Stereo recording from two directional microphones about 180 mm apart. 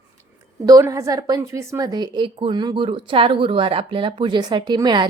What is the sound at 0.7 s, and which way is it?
A woman's voice, 15° right (ahead or behind).